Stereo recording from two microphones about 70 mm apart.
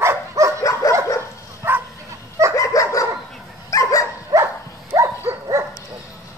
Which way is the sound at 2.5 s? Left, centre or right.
Left.